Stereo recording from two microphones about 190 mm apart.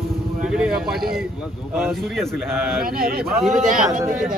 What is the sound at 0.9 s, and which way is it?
Speech, 55° right (ahead or behind).